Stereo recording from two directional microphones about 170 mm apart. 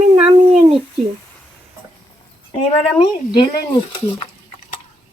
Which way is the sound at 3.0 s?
30° left (ahead or behind).